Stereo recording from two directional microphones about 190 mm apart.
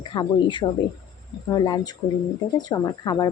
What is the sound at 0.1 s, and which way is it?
A woman's voice, 25° left (ahead or behind).